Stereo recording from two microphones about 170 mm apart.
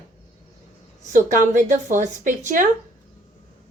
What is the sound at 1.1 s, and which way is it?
A woman's voice, 50° right (ahead or behind).